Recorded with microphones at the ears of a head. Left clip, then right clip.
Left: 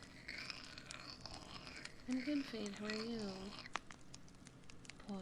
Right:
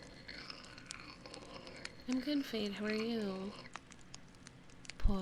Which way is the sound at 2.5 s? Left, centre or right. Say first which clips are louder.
Right 7 dB; right.